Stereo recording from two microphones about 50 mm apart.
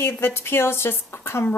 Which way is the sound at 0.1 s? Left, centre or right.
Left.